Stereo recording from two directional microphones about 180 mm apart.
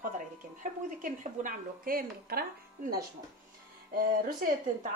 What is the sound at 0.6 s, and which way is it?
A woman's voice, 45° right (ahead or behind).